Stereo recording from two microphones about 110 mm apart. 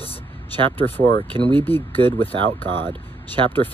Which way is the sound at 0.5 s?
15° left (ahead or behind).